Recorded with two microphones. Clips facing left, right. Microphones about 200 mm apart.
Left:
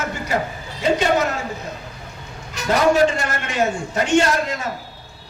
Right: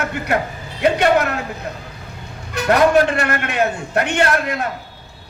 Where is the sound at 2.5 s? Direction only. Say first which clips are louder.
Right 3 dB; 60° right (ahead or behind).